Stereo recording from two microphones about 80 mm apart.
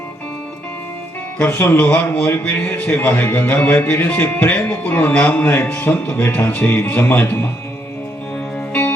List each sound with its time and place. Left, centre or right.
1.4 s speech: left